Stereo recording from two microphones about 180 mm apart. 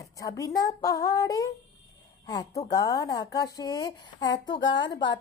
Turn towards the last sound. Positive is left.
turn(degrees=25)  # may be behind; listen again after turning